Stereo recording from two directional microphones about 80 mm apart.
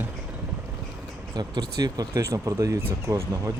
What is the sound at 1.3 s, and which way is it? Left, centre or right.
Speech, right.